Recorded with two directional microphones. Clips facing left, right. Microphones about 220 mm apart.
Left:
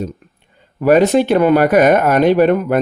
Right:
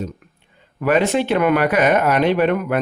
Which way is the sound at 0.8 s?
40° left (ahead or behind).